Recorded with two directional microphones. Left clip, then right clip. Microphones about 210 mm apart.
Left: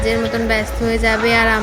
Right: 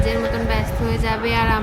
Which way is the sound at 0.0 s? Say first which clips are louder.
Left 4 dB; 15° left (ahead or behind).